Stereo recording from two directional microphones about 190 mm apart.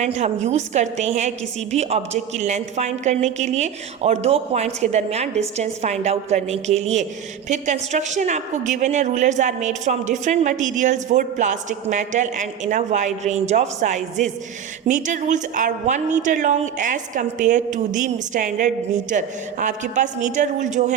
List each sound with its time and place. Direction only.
0.0 s a woman's voice: 35° right (ahead or behind)